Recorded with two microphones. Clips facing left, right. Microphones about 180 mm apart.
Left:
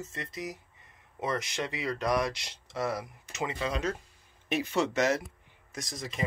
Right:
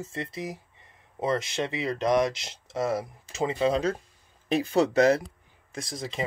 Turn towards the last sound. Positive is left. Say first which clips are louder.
# right 3 dB
turn(degrees=-30)  # may be behind; listen again after turning